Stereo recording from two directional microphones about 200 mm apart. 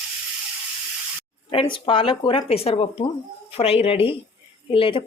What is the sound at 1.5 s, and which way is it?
Speech, 25° left (ahead or behind).